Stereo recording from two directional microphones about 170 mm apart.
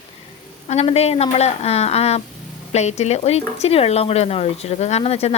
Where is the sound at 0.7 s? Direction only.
40° left (ahead or behind).